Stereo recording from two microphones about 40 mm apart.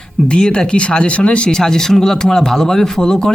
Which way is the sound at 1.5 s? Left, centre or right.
Centre.